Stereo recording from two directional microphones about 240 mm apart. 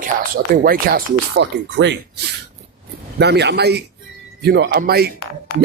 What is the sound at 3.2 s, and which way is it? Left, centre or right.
Speech, right.